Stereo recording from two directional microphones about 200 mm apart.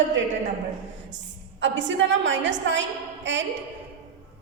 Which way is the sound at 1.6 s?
65° right (ahead or behind).